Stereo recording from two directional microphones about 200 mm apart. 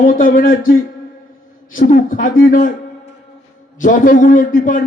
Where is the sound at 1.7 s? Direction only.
45° left (ahead or behind).